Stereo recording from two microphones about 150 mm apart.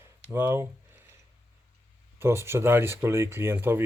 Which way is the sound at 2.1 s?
15° right (ahead or behind).